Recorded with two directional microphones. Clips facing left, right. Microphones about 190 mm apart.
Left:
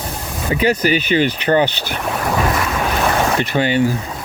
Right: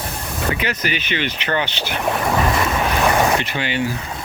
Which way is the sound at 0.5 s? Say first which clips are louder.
Left 8 dB; 40° left (ahead or behind).